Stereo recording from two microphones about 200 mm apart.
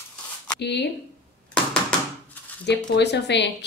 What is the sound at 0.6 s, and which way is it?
Speech, 60° left (ahead or behind).